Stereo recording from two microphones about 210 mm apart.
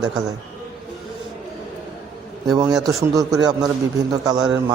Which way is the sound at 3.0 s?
15° right (ahead or behind).